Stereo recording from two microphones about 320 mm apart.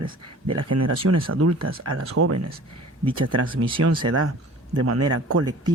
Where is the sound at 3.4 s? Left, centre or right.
Centre.